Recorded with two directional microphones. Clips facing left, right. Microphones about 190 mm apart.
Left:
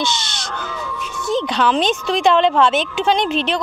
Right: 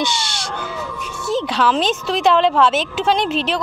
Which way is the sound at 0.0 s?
10° right (ahead or behind).